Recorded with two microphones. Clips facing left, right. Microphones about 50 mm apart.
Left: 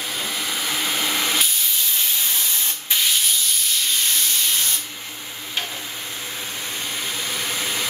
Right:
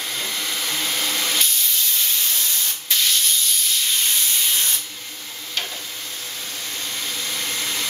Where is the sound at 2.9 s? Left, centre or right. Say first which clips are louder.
Even; centre.